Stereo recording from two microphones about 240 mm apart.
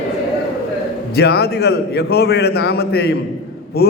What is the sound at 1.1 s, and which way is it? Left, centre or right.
A man's voice, left.